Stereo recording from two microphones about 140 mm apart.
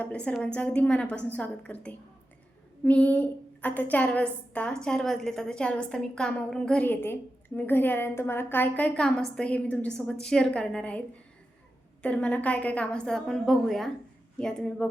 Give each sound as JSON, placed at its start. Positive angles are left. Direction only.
{"t": 0.0, "sound": "a woman's voice", "side_deg": 10}
{"t": 12.0, "sound": "a woman's voice", "side_deg": 10}